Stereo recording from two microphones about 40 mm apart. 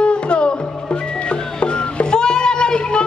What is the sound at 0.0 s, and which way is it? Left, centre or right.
Music, left.